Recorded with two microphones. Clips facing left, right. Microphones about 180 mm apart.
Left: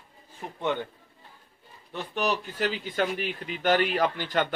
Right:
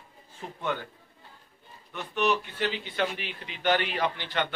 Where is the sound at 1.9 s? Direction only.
35° left (ahead or behind).